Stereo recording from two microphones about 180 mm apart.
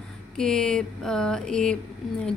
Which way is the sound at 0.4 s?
5° left (ahead or behind).